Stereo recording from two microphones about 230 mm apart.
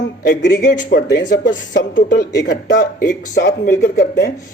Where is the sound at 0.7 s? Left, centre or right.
Left.